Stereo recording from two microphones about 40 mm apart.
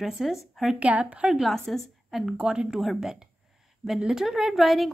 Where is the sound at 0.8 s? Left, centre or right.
Right.